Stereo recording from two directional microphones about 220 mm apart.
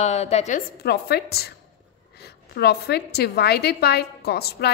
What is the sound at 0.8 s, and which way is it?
Speech, 45° left (ahead or behind).